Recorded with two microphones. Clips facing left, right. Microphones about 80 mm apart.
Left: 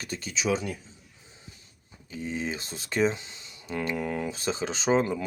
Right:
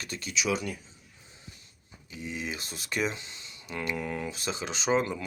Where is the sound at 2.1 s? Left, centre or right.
Left.